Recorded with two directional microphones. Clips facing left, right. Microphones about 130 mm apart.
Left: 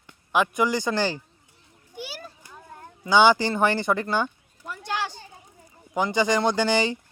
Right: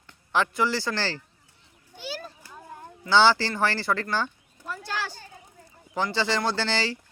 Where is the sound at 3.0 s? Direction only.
15° left (ahead or behind).